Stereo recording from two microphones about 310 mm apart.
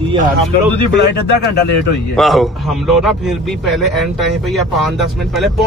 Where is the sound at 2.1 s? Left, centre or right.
Centre.